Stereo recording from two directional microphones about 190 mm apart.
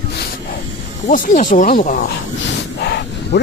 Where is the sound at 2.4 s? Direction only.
60° left (ahead or behind).